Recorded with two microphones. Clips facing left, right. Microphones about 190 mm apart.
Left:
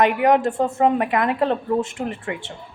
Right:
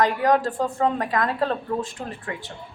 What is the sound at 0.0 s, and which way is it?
A woman's voice, 20° left (ahead or behind).